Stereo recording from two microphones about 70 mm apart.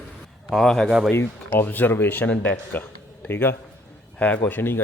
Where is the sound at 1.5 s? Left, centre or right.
Left.